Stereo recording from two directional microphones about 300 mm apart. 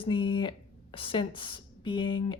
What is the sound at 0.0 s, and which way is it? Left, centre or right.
Speech, centre.